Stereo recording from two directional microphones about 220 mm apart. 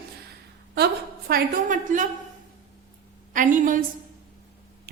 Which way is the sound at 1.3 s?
35° right (ahead or behind).